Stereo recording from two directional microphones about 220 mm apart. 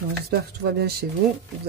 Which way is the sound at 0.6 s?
50° right (ahead or behind).